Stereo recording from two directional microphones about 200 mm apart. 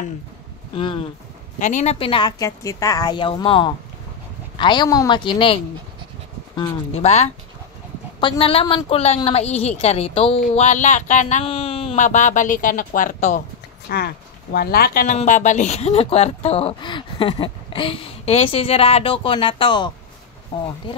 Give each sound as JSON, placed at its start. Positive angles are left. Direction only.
{"t": 0.7, "sound": "speech", "side_deg": 25}
{"t": 1.6, "sound": "speech", "side_deg": 35}
{"t": 6.9, "sound": "a woman's voice", "side_deg": 35}
{"t": 13.8, "sound": "speech", "side_deg": 50}
{"t": 15.1, "sound": "speech", "side_deg": 40}